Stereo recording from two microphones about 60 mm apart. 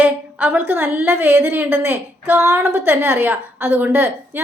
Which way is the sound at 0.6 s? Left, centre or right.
Right.